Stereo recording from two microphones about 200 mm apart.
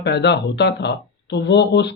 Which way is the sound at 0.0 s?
55° left (ahead or behind).